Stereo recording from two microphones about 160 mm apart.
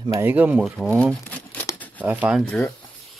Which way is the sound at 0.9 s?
5° left (ahead or behind).